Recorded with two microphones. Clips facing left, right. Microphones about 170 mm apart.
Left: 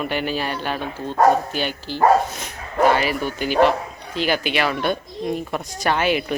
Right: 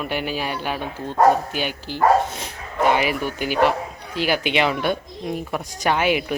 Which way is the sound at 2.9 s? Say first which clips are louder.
Right 1 dB; 15° right (ahead or behind).